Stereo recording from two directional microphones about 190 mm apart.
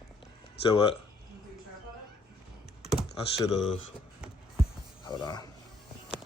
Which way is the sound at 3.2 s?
30° left (ahead or behind).